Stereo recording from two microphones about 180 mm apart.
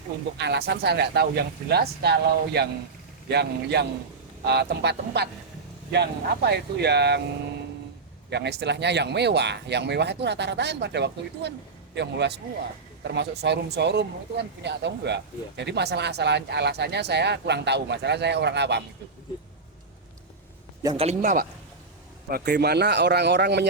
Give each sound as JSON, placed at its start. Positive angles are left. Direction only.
{"t": 0.3, "sound": "speech", "side_deg": -70}
{"t": 8.3, "sound": "speech", "side_deg": -70}
{"t": 20.8, "sound": "speech", "side_deg": -30}
{"t": 22.3, "sound": "speech", "side_deg": -60}